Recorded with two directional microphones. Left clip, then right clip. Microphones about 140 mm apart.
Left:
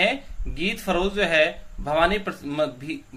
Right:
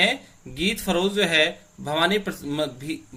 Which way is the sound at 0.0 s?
20° right (ahead or behind).